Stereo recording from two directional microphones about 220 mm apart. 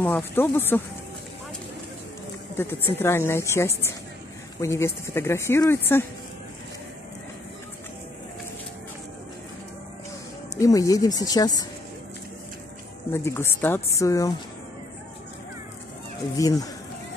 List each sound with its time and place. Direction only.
0.0 s speech: 10° left (ahead or behind)
2.5 s speech: 10° left (ahead or behind)
10.6 s speech: 15° left (ahead or behind)
13.1 s speech: 10° left (ahead or behind)
16.3 s speech: 15° left (ahead or behind)